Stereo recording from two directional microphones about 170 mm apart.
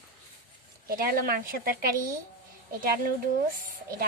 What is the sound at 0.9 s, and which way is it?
Speech, 60° right (ahead or behind).